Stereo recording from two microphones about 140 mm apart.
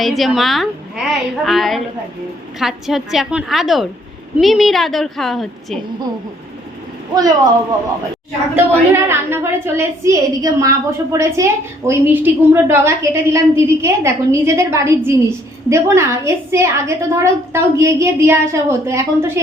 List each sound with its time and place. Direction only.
0.0 s a woman's voice: centre (ahead or behind)
7.1 s a woman's voice: 25° right (ahead or behind)
8.5 s a woman's voice: 15° right (ahead or behind)